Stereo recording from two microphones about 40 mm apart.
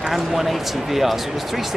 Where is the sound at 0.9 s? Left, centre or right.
Centre.